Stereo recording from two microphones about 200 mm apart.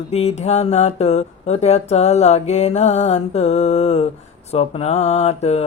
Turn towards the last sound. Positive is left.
turn(degrees=30)  # may be behind; listen again after turning